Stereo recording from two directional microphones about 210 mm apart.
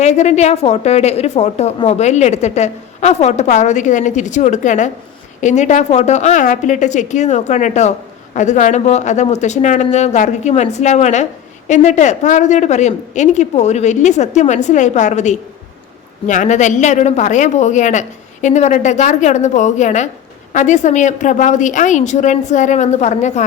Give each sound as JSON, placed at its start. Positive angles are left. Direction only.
{"t": 0.0, "sound": "a woman's voice", "side_deg": 35}